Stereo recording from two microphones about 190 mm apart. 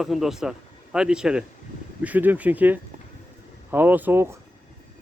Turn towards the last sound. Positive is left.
turn(degrees=-15)  # may be behind; listen again after turning